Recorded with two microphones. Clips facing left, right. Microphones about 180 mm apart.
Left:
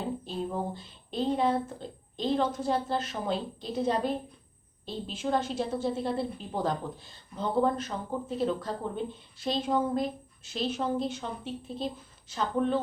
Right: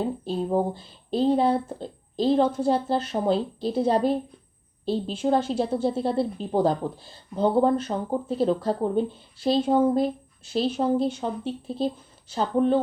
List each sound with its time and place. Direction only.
0.3 s a woman's voice: 30° right (ahead or behind)